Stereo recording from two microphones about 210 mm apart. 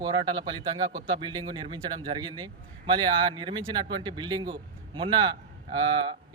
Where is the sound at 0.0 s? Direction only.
20° right (ahead or behind).